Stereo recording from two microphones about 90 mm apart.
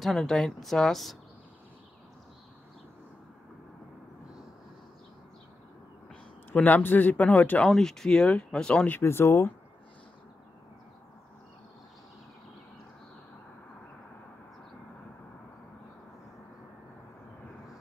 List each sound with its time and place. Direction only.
0.0 s speech: 5° left (ahead or behind)
6.5 s speech: 20° left (ahead or behind)
7.6 s speech: 5° left (ahead or behind)
8.9 s speech: 30° left (ahead or behind)